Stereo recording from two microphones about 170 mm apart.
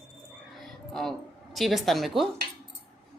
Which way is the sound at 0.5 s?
Centre (ahead or behind).